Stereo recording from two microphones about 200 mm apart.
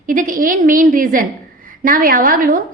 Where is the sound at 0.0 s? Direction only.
40° right (ahead or behind).